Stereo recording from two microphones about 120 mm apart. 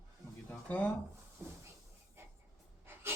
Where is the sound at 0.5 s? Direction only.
15° left (ahead or behind).